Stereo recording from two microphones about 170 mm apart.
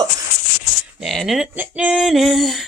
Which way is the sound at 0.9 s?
Centre (ahead or behind).